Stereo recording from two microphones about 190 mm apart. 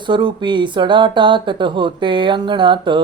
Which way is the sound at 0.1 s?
25° right (ahead or behind).